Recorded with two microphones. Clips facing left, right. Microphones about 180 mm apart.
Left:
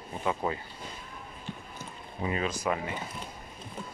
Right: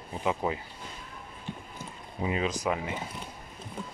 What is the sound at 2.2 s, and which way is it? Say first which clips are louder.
Speech: right 2 dB; 15° right (ahead or behind).